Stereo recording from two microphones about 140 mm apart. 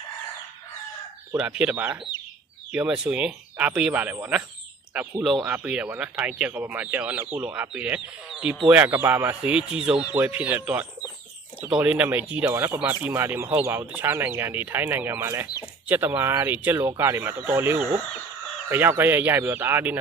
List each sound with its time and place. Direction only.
1.3 s speech: 5° right (ahead or behind)